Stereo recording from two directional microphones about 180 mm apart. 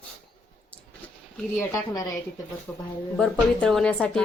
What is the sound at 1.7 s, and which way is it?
Speech, 20° left (ahead or behind).